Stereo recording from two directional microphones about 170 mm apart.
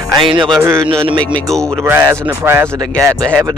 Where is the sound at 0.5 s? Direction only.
15° right (ahead or behind).